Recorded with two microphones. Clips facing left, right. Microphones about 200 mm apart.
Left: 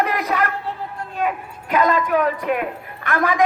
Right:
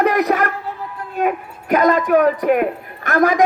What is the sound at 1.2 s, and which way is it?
A woman's voice, 50° right (ahead or behind).